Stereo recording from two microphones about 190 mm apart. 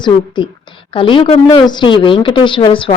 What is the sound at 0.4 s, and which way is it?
A woman's voice, 25° left (ahead or behind).